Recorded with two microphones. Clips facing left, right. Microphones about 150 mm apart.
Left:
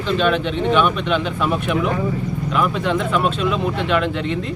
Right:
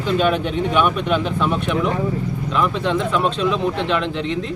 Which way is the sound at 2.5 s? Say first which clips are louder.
Even; 5° left (ahead or behind).